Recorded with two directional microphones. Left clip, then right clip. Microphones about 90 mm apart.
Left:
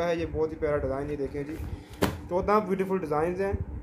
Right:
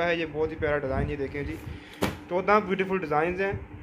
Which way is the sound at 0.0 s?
15° left (ahead or behind).